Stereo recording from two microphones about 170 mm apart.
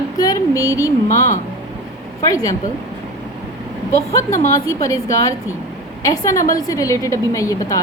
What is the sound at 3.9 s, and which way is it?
A woman's voice, 20° left (ahead or behind).